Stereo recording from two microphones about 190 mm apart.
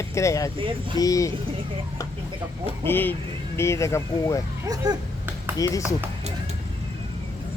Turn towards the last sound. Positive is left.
turn(degrees=20)  # may be behind; listen again after turning